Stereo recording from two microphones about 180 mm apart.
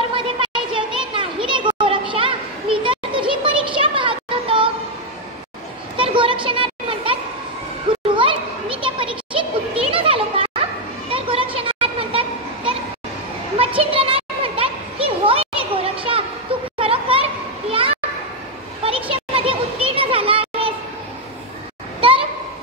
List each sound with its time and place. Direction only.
0.1 s children playing: 25° right (ahead or behind)
5.9 s children playing: 30° right (ahead or behind)
7.9 s a sound: 30° right (ahead or behind)
8.2 s children playing: 30° right (ahead or behind)
13.6 s a sound: 30° right (ahead or behind)
16.7 s children playing: 30° right (ahead or behind)